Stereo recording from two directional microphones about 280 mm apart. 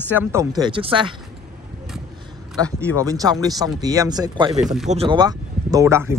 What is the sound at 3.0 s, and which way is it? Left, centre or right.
Speech, centre.